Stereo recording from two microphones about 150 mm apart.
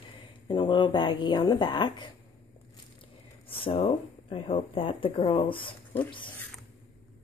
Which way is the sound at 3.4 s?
35° left (ahead or behind).